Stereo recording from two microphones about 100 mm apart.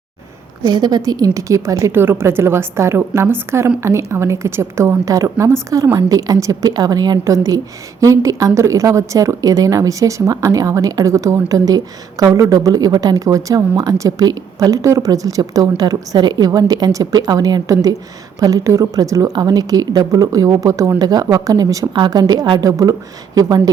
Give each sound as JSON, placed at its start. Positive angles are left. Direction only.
{"t": 0.6, "sound": "a woman's voice", "side_deg": -45}